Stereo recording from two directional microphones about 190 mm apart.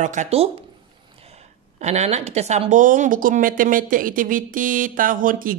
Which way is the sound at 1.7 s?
35° right (ahead or behind).